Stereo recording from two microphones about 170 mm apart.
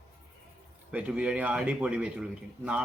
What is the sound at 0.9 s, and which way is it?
A man's voice, 5° right (ahead or behind).